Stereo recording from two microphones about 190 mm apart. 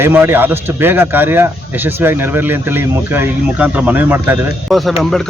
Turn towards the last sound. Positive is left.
turn(degrees=0)  # may be behind; listen again after turning